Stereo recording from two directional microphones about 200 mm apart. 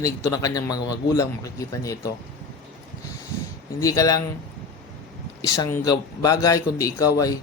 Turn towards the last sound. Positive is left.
turn(degrees=15)  # may be behind; listen again after turning